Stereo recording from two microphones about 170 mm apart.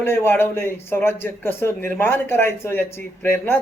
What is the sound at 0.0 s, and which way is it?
A man's voice, 15° left (ahead or behind).